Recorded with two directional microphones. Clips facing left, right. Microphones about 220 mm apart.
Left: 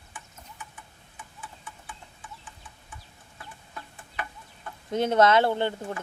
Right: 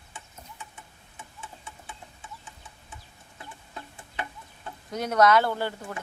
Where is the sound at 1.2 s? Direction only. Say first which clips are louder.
Right 1 dB; 25° right (ahead or behind).